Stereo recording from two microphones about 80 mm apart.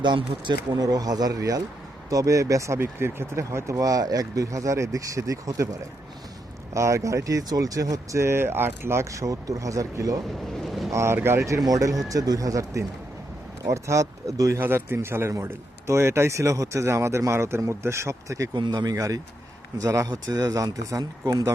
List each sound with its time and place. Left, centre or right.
0.0 s speech: right
0.7 s speech: right
6.7 s a man's voice: right
10.6 s boat: centre
10.9 s a man's voice: right
14.6 s a man's voice: right
18.5 s a man's voice: right
20.1 s speech: right